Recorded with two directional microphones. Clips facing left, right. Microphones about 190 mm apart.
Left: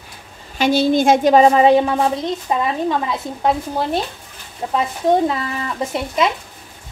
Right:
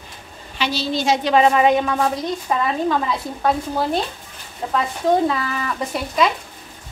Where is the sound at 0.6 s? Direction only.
50° left (ahead or behind).